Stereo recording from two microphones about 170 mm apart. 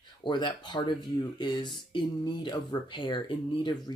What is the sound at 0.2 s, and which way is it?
Speech, 30° left (ahead or behind).